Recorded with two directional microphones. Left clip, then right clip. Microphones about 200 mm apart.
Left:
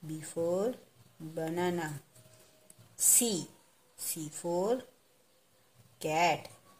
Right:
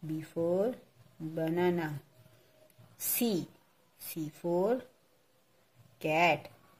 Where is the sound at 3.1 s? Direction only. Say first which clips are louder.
Left 1 dB; 15° right (ahead or behind).